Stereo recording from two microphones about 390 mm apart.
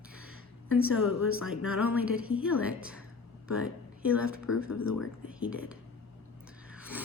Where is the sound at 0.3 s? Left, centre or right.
Left.